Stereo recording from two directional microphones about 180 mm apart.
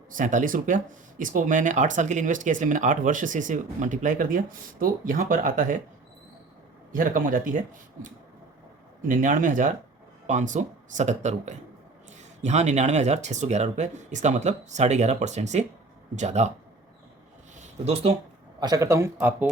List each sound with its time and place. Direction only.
0.1 s speech: 45° right (ahead or behind)
6.9 s speech: 50° right (ahead or behind)
9.0 s speech: 45° right (ahead or behind)
17.6 s a sound: 35° right (ahead or behind)
18.6 s speech: 20° right (ahead or behind)